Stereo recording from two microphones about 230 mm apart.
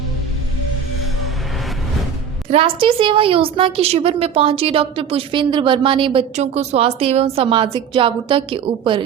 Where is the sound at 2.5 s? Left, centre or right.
Right.